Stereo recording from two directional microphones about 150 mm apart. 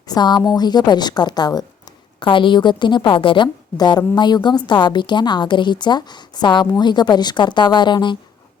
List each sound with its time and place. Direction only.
0.1 s a woman's voice: 30° left (ahead or behind)